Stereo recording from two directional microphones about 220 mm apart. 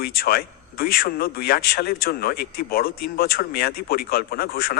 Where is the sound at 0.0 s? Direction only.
45° left (ahead or behind).